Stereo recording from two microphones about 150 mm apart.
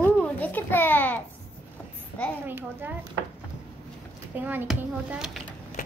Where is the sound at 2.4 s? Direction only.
15° right (ahead or behind).